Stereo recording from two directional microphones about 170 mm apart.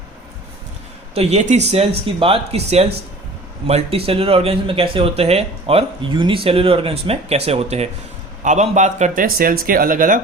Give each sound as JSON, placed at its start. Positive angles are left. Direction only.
{"t": 1.1, "sound": "speech", "side_deg": -40}